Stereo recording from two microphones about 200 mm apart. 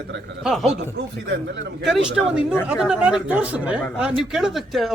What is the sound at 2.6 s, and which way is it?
Speech, 5° right (ahead or behind).